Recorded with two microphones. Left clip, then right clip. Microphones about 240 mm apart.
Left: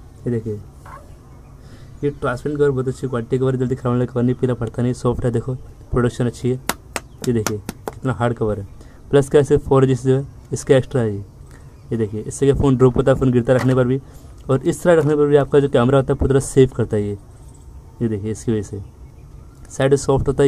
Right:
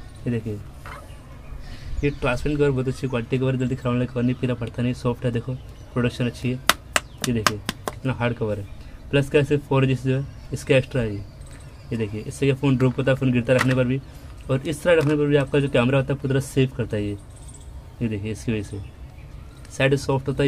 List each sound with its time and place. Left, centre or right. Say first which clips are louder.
2.0 s speech: left 2 dB; centre
7.4 s a sound: right 2 dB; centre
8.0 s speech: left 7 dB; left
18.0 s speech: left 6 dB; left
19.8 s speech: left 5 dB; left